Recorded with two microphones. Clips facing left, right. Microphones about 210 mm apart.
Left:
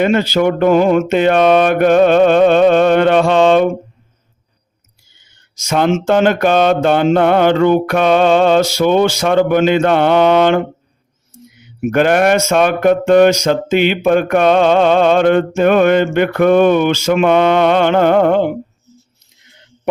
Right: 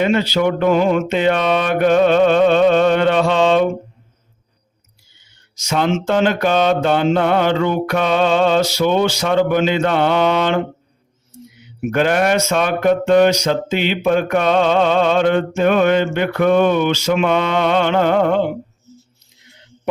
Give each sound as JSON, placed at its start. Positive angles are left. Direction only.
{"t": 0.0, "sound": "mantra", "side_deg": 50}
{"t": 5.5, "sound": "speech", "side_deg": 50}
{"t": 11.9, "sound": "speech", "side_deg": 55}